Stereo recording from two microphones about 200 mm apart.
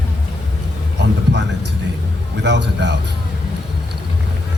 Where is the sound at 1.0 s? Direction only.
60° right (ahead or behind).